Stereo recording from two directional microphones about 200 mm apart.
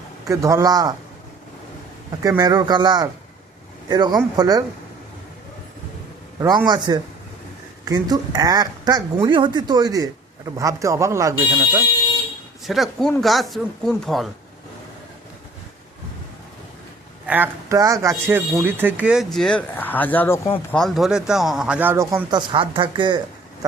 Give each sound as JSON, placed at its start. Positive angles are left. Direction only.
{"t": 0.3, "sound": "a woman's voice", "side_deg": -15}
{"t": 2.2, "sound": "a woman's voice", "side_deg": -20}
{"t": 6.4, "sound": "a woman's voice", "side_deg": -20}
{"t": 12.6, "sound": "speech", "side_deg": 0}
{"t": 17.2, "sound": "speech", "side_deg": -10}
{"t": 20.7, "sound": "speech", "side_deg": 0}